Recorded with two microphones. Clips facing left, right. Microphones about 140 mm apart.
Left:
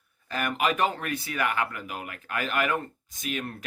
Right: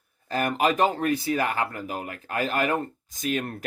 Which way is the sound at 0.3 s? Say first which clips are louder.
Right 4 dB; 35° right (ahead or behind).